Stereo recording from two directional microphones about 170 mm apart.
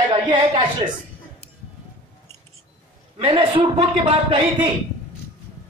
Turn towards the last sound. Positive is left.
turn(degrees=-30)  # may be behind; listen again after turning